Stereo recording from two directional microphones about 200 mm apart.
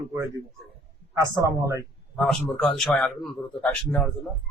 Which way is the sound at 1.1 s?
15° right (ahead or behind).